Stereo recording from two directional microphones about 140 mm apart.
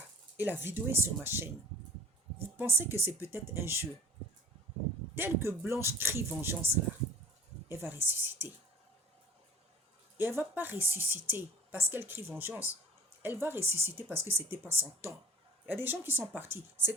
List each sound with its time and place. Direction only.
0.3 s speech: 15° right (ahead or behind)
2.6 s speech: 15° right (ahead or behind)
5.1 s speech: 15° right (ahead or behind)
7.7 s speech: 15° right (ahead or behind)
10.2 s speech: 15° right (ahead or behind)
14.1 s speech: 45° right (ahead or behind)
14.3 s speech: 15° right (ahead or behind)